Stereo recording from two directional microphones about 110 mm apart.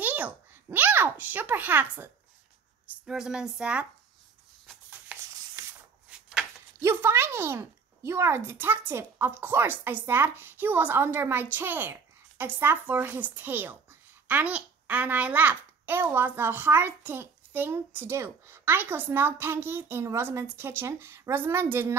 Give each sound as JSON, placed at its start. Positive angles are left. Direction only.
{"t": 0.0, "sound": "a child's voice", "side_deg": -15}
{"t": 2.9, "sound": "a woman's voice", "side_deg": -5}
{"t": 6.1, "sound": "a sound", "side_deg": -10}
{"t": 6.8, "sound": "speech", "side_deg": -20}